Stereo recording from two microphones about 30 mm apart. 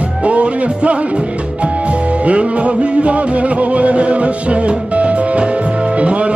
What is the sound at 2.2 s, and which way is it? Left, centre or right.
Music, right.